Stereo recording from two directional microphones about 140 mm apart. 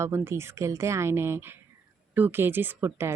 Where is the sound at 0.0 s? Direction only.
20° right (ahead or behind).